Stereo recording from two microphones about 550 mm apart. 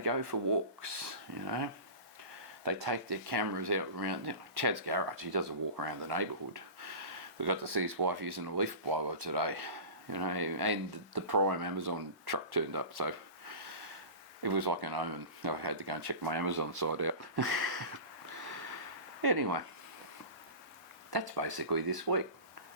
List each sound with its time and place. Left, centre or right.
0.0 s speech: right
14.4 s speech: right
19.2 s speech: right
21.1 s speech: right